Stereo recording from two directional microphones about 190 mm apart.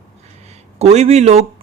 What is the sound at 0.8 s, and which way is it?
Speech, 35° right (ahead or behind).